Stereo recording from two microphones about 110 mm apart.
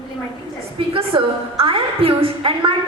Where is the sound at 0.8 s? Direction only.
55° right (ahead or behind).